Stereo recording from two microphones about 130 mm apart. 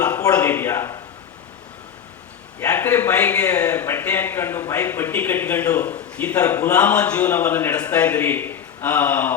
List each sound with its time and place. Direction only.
0.3 s speech: 15° left (ahead or behind)
2.6 s a man's voice: 15° left (ahead or behind)